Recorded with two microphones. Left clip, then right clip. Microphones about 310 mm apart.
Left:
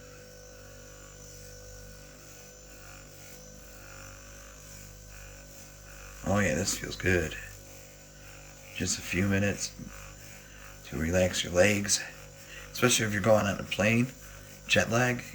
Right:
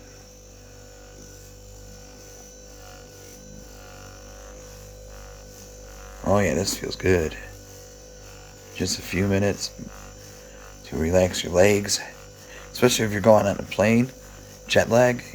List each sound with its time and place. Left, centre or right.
6.3 s speech: centre
8.8 s speech: centre
10.8 s speech: centre